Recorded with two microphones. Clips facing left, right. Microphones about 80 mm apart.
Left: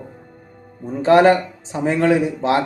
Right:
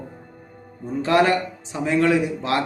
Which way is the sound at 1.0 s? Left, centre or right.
Left.